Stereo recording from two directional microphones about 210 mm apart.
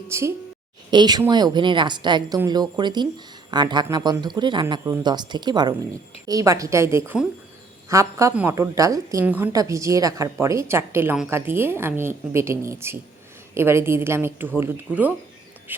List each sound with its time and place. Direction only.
0.1 s a woman's voice: 10° right (ahead or behind)